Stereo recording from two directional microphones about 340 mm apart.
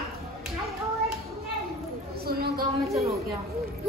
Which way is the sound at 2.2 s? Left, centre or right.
Right.